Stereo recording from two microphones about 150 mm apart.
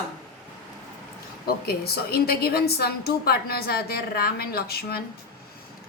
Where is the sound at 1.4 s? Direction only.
90° left.